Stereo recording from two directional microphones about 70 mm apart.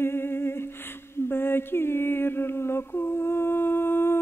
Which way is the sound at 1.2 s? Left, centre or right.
Left.